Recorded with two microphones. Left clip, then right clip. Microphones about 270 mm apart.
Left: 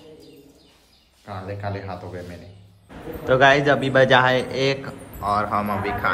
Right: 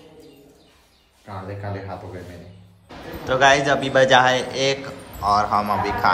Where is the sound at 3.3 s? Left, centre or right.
Centre.